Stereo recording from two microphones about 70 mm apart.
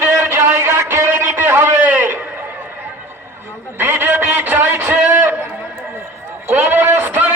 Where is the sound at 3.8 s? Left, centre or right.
Right.